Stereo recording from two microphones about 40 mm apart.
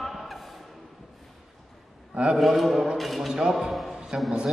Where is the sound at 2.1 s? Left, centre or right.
Right.